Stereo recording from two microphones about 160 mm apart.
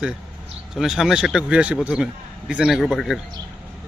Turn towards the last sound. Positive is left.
turn(degrees=0)  # may be behind; listen again after turning